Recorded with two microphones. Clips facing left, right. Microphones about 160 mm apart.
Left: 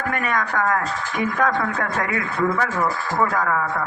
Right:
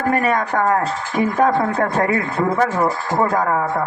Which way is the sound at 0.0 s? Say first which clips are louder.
Right 6 dB; 35° right (ahead or behind).